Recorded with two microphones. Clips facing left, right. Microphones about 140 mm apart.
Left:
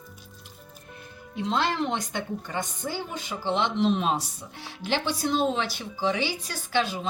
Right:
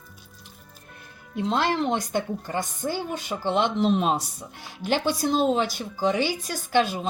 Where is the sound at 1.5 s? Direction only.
45° right (ahead or behind).